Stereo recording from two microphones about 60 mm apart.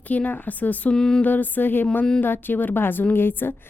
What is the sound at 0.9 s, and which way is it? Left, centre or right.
Music, centre.